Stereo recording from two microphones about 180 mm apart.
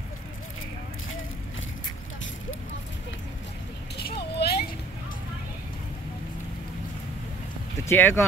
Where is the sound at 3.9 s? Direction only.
60° left (ahead or behind).